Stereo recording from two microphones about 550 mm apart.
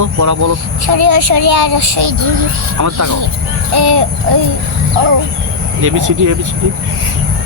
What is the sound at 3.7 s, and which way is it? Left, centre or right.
Child singing, right.